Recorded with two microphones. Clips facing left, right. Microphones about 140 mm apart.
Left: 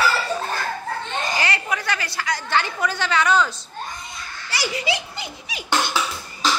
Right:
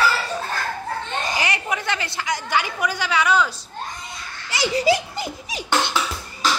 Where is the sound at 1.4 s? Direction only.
20° right (ahead or behind).